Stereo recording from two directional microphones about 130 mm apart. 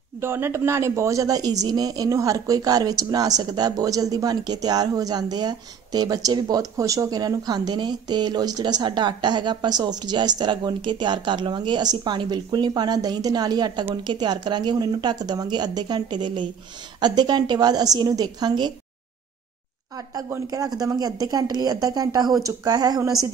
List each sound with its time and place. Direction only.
0.2 s speech: 20° right (ahead or behind)
20.2 s speech: 30° right (ahead or behind)